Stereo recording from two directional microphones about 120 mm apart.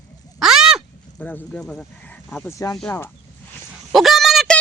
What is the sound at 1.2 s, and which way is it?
Speech, 10° left (ahead or behind).